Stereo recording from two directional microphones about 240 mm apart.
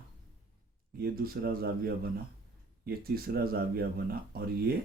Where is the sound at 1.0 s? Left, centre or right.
Right.